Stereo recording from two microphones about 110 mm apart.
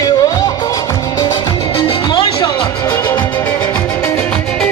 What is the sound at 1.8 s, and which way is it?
Music, 40° left (ahead or behind).